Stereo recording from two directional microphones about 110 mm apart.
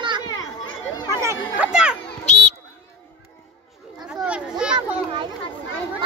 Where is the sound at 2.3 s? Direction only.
90° left.